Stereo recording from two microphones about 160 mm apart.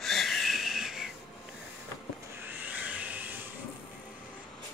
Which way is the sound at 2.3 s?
10° right (ahead or behind).